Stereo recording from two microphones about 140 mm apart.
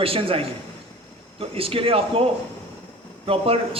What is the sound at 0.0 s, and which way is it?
A man's voice, 40° right (ahead or behind).